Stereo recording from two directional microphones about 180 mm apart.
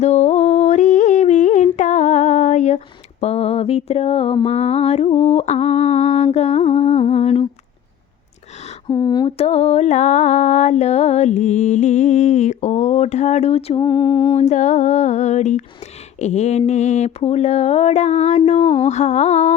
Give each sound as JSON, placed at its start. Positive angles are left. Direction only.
{"t": 0.0, "sound": "humming", "side_deg": 40}
{"t": 8.9, "sound": "a sound", "side_deg": 20}
{"t": 9.4, "sound": "mantra", "side_deg": 35}